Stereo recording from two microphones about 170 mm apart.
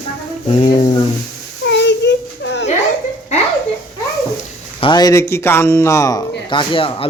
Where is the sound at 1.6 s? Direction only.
90° left.